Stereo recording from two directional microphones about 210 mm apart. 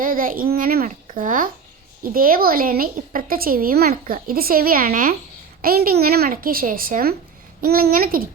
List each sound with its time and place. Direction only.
0.0 s a child's voice: 40° right (ahead or behind)